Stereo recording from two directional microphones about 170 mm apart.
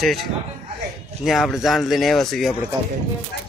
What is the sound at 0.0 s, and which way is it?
Speech, centre (ahead or behind).